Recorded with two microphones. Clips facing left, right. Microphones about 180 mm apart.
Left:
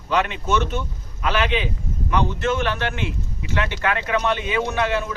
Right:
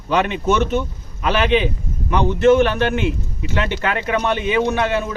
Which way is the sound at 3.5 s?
25° right (ahead or behind).